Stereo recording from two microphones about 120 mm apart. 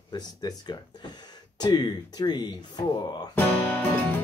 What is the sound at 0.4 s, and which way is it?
Speech, 35° left (ahead or behind).